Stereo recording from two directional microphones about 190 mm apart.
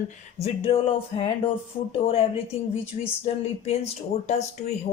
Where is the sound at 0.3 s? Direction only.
30° left (ahead or behind).